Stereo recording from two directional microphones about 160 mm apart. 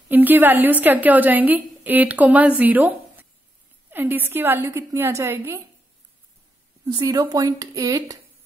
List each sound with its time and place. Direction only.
0.1 s a woman's voice: 10° right (ahead or behind)
6.9 s speech: 25° right (ahead or behind)